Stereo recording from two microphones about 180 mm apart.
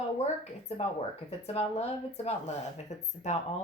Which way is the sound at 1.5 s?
35° left (ahead or behind).